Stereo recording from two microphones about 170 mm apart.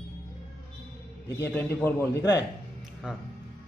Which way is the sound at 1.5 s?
10° left (ahead or behind).